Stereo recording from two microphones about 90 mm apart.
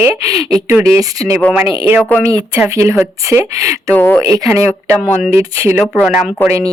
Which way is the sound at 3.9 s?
15° left (ahead or behind).